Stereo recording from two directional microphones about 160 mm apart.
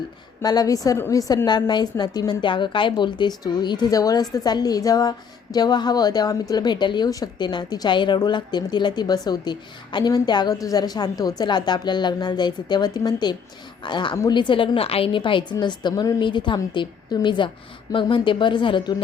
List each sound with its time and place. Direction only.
0.4 s a woman's voice: 25° left (ahead or behind)